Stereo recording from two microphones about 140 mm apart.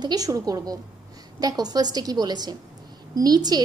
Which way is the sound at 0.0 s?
25° right (ahead or behind).